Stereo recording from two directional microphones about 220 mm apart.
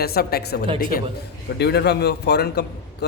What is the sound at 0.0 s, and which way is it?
A man's voice, 45° left (ahead or behind).